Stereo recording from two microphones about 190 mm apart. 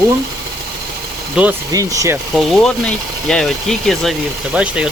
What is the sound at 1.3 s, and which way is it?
Speech, 10° right (ahead or behind).